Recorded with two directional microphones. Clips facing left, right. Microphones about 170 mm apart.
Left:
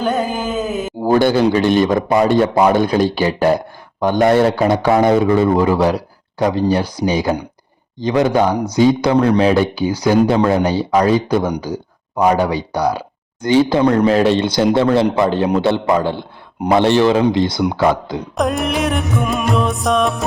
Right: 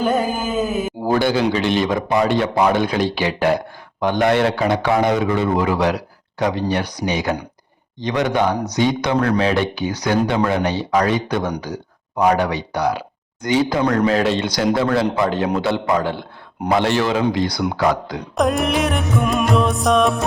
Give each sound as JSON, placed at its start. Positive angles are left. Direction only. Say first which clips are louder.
{"t": 0.0, "sound": "a sound", "louder": "left 1 dB", "side_deg": -5}
{"t": 1.0, "sound": "a man's voice", "louder": "left 5 dB", "side_deg": 50}
{"t": 18.3, "sound": "music", "louder": "even", "side_deg": 0}